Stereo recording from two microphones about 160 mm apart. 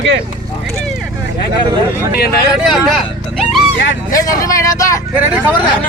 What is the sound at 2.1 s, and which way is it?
Speech, 70° left (ahead or behind).